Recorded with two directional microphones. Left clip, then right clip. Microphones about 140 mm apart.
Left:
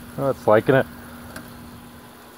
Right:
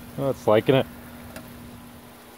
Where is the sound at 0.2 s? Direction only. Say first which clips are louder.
Left 3 dB; 5° right (ahead or behind).